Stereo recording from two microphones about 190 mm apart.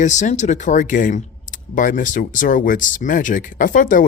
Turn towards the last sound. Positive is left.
turn(degrees=45)  # may be behind; listen again after turning